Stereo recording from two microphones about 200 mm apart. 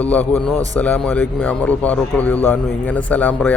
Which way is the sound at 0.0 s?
5° left (ahead or behind).